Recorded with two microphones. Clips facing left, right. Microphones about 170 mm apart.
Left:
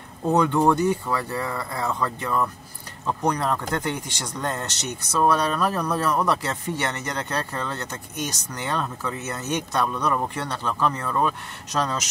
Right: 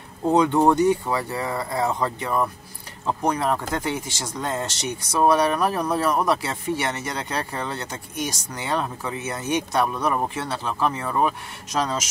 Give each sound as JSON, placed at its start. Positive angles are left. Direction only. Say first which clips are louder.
{"t": 0.3, "sound": "speech", "louder": "right 2 dB", "side_deg": -15}